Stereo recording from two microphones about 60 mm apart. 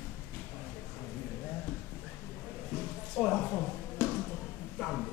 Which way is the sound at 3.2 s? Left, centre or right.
Centre.